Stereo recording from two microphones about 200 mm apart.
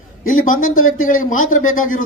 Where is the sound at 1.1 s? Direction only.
40° left (ahead or behind).